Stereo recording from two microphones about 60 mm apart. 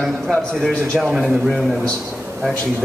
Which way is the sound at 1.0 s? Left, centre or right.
Centre.